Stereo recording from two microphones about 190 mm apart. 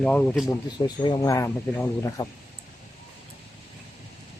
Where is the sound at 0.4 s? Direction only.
20° left (ahead or behind).